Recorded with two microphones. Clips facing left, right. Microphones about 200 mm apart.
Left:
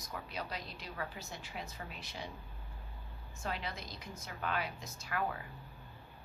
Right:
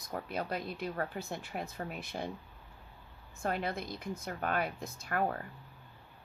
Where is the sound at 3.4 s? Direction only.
55° right (ahead or behind).